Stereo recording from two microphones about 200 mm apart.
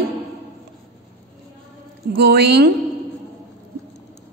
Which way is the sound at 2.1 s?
55° right (ahead or behind).